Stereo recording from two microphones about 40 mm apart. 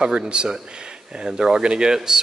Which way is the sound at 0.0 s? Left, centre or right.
Right.